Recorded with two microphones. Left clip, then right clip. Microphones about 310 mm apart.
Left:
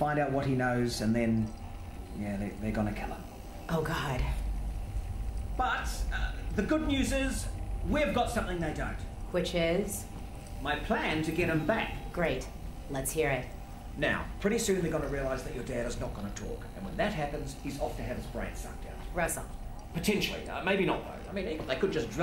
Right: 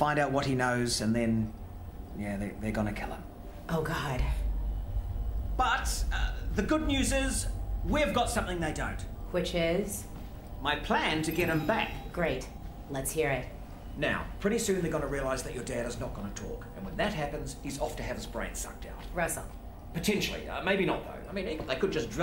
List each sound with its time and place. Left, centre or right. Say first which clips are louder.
0.0 s a sound: right 2 dB; centre
0.6 s speech: right 1 dB; centre
1.0 s a man's voice: even; centre
3.6 s a man's voice: even; centre
5.8 s a man's voice: right 1 dB; centre
18.3 s speech: right 2 dB; centre
19.1 s a man's voice: even; centre